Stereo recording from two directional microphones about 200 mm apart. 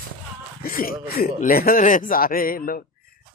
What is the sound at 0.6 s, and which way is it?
A man's voice, 45° left (ahead or behind).